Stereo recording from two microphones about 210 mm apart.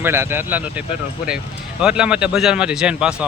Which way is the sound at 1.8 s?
5° right (ahead or behind).